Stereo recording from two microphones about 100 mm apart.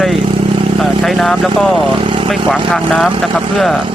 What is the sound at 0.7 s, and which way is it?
Speech, centre (ahead or behind).